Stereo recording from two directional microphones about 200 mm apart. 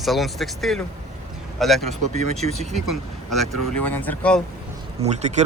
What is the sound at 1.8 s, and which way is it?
Speech, 35° right (ahead or behind).